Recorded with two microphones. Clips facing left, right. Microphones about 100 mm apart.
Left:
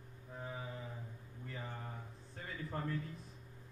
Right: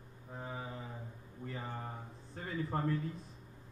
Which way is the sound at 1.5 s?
35° right (ahead or behind).